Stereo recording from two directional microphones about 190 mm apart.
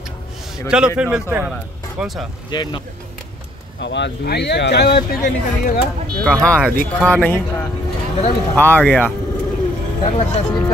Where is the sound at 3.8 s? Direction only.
65° left (ahead or behind).